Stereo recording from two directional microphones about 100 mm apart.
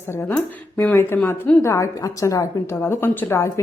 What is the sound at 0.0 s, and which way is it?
A woman's voice, 25° left (ahead or behind).